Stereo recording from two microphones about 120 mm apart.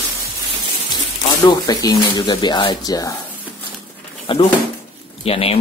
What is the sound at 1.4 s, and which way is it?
Speech, 35° left (ahead or behind).